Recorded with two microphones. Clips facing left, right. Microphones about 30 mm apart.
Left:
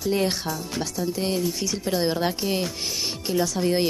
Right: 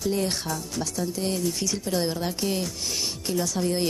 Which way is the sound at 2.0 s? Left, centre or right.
Left.